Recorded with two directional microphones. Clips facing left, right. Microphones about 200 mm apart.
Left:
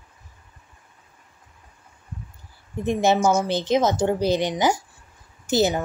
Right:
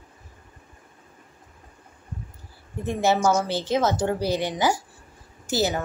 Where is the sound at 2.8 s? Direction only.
20° left (ahead or behind).